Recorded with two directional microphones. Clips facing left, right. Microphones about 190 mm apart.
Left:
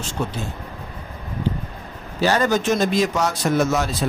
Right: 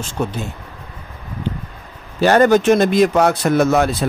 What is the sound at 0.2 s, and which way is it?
Speech, 55° right (ahead or behind).